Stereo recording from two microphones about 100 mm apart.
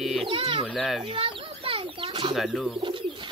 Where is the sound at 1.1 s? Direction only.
60° right (ahead or behind).